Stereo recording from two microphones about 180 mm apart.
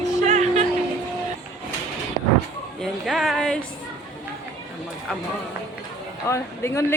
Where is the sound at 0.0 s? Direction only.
40° right (ahead or behind).